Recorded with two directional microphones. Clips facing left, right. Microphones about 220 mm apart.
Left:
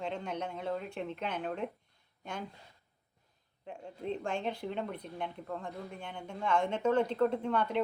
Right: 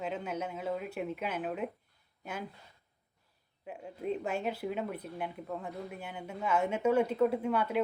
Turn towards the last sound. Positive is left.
turn(degrees=-5)  # may be behind; listen again after turning